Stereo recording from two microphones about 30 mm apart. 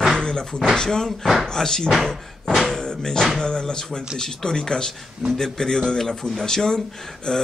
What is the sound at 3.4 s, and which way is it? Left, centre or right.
A man's voice, left.